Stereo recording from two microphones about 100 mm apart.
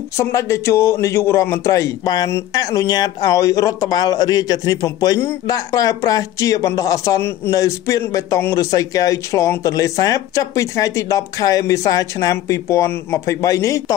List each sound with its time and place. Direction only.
0.2 s a man's voice: 30° left (ahead or behind)